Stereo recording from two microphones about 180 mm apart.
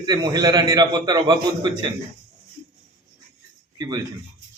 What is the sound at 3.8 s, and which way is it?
Speech, 20° right (ahead or behind).